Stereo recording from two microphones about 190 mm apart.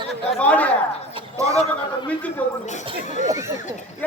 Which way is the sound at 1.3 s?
15° right (ahead or behind).